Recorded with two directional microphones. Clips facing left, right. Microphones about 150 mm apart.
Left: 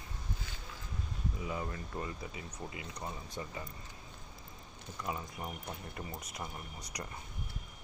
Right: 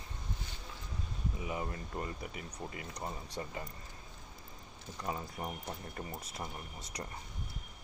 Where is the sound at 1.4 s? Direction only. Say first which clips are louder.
Right 1 dB; 20° right (ahead or behind).